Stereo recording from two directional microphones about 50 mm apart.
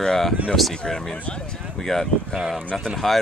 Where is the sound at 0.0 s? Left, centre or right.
Centre.